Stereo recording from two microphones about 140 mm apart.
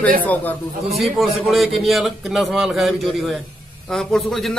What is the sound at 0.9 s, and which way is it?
A man's voice, centre (ahead or behind).